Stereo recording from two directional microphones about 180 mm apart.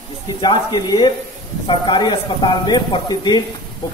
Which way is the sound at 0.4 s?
25° left (ahead or behind).